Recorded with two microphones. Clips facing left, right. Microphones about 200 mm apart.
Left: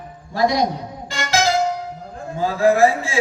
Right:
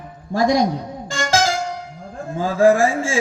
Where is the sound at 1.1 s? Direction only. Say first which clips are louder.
Right 1 dB; 45° right (ahead or behind).